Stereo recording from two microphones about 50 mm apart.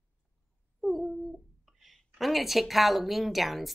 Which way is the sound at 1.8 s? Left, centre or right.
Centre.